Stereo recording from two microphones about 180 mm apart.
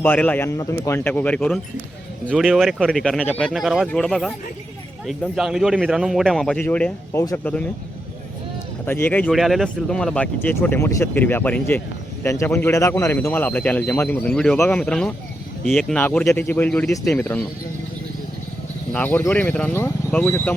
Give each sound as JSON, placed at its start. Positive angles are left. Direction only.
{"t": 0.0, "sound": "speech", "side_deg": 10}
{"t": 8.9, "sound": "speech", "side_deg": 10}
{"t": 18.9, "sound": "speech", "side_deg": 10}